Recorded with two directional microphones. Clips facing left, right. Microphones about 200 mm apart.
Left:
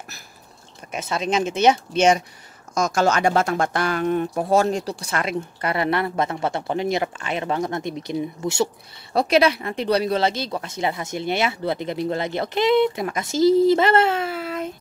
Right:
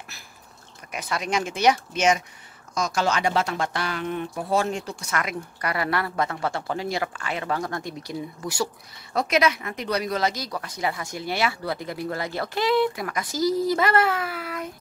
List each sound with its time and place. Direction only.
0.9 s speech: 25° left (ahead or behind)
2.7 s speech: 50° left (ahead or behind); by 14.7 s 25° left (ahead or behind)